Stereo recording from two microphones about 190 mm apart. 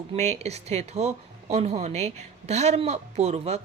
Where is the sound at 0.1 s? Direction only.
35° right (ahead or behind).